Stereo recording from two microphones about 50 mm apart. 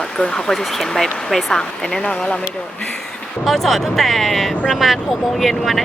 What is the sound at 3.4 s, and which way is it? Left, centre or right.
Speech, centre.